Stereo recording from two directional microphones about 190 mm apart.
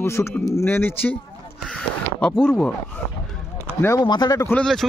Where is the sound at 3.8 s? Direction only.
20° left (ahead or behind).